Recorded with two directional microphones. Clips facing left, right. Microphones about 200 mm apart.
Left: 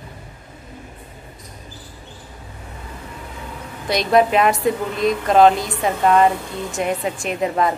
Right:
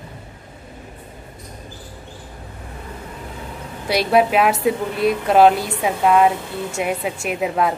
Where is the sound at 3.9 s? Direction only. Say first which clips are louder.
Even; 5° right (ahead or behind).